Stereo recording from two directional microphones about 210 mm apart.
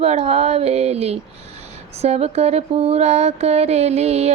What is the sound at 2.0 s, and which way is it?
Mantra, 30° right (ahead or behind).